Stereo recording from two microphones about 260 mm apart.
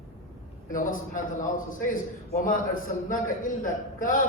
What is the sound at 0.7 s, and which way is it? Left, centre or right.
A man's voice, left.